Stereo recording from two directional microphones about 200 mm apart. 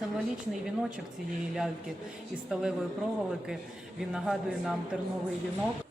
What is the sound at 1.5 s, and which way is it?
A man's voice, 5° right (ahead or behind).